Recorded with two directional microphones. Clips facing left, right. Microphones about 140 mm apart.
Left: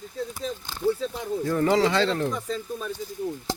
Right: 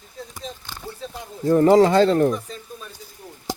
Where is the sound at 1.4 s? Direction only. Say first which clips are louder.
Right 8 dB; 35° right (ahead or behind).